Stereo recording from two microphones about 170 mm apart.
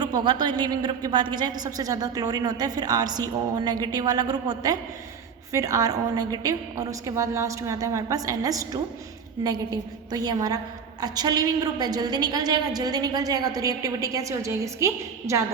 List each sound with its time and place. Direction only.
0.0 s a woman's voice: 25° right (ahead or behind)